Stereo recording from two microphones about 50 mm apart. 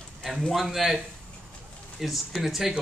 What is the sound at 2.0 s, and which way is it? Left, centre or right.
Speech, centre.